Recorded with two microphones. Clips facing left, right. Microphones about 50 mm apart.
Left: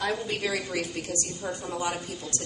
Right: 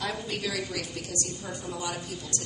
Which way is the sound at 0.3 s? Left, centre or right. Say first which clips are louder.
Left 3 dB; left.